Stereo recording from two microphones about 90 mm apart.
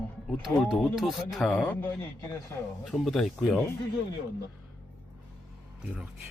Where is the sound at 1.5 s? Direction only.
15° left (ahead or behind).